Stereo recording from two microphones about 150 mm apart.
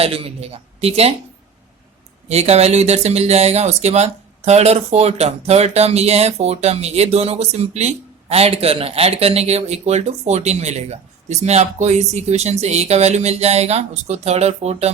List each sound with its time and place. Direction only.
0.0 s speech: 40° right (ahead or behind)
2.3 s speech: 45° right (ahead or behind)